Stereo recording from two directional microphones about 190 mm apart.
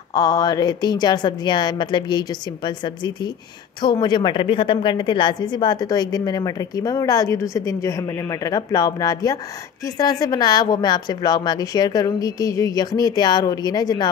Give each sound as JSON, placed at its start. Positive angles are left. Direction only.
{"t": 0.1, "sound": "a woman's voice", "side_deg": 20}